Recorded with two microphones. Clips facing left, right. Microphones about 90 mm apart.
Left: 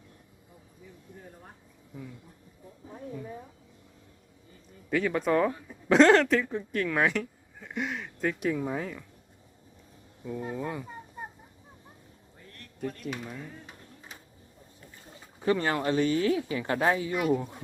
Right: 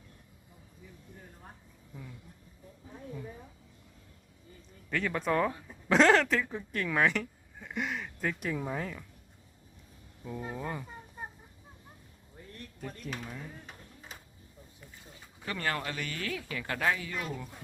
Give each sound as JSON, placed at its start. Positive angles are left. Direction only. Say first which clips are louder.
{"t": 1.9, "sound": "speech", "louder": "left 5 dB", "side_deg": 0}
{"t": 4.9, "sound": "speech", "louder": "left 5 dB", "side_deg": 5}
{"t": 10.2, "sound": "speech", "louder": "left 4 dB", "side_deg": 0}
{"t": 12.8, "sound": "speech", "louder": "left 6 dB", "side_deg": 0}
{"t": 15.4, "sound": "speech", "louder": "left 8 dB", "side_deg": 25}